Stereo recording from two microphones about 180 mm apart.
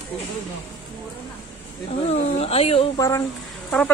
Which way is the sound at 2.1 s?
35° left (ahead or behind).